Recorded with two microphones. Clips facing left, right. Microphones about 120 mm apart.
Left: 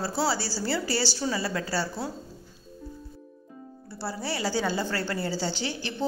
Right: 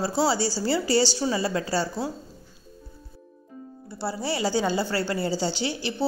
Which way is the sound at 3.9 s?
15° right (ahead or behind).